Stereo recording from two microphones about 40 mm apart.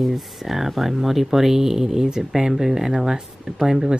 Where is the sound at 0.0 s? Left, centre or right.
Centre.